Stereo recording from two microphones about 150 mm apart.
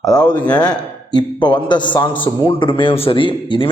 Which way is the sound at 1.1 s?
30° left (ahead or behind).